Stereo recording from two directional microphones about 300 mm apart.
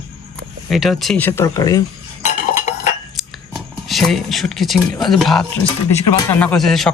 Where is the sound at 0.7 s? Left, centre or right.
Centre.